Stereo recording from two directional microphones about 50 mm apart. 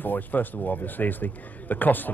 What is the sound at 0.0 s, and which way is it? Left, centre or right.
A man's voice, left.